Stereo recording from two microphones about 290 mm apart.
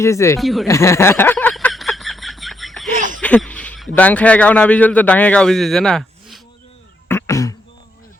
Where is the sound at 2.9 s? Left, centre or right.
Right.